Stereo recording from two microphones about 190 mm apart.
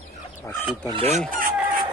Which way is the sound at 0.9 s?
35° right (ahead or behind).